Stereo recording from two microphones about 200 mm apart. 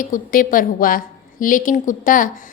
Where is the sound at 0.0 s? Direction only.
45° left (ahead or behind).